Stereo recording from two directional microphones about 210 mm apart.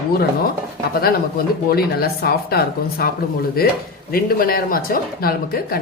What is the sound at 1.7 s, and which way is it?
Speech, 45° left (ahead or behind).